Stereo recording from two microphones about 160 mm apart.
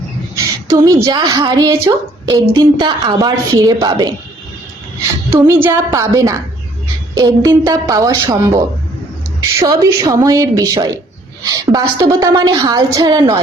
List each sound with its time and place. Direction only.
0.7 s a woman's voice: 20° right (ahead or behind)
5.3 s a woman's voice: 15° right (ahead or behind)